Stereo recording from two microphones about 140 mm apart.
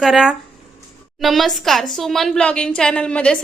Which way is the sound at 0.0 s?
Centre (ahead or behind).